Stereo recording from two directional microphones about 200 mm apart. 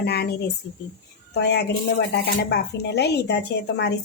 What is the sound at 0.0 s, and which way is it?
Speech, 50° left (ahead or behind).